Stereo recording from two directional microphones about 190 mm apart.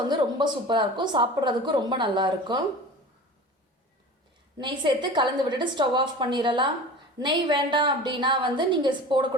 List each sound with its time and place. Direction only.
0.1 s speech: 25° right (ahead or behind)
4.5 s speech: 25° right (ahead or behind)